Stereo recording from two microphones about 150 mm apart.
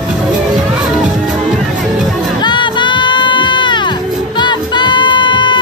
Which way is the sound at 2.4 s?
30° left (ahead or behind).